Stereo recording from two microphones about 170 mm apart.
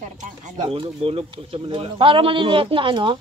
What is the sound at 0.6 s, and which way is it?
Speech, 35° right (ahead or behind).